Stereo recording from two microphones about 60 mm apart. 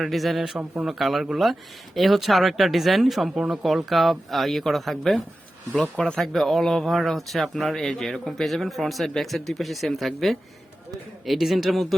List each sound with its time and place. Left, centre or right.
0.0 s speech: centre
5.8 s speech: centre
6.1 s speech: centre